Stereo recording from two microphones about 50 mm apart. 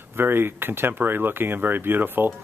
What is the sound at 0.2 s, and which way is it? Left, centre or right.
Speech, right.